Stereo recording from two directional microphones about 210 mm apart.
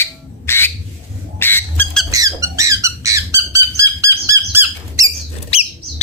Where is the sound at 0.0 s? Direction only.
10° left (ahead or behind).